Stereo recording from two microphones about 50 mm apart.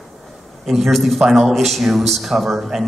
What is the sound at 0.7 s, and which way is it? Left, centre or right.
A man's voice, centre.